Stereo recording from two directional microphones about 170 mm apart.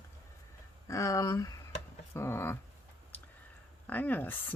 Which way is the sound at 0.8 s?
20° left (ahead or behind).